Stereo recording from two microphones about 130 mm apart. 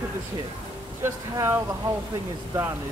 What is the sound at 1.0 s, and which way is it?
Speech, 20° right (ahead or behind).